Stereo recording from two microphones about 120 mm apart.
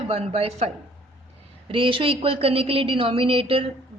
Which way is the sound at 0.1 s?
60° right (ahead or behind).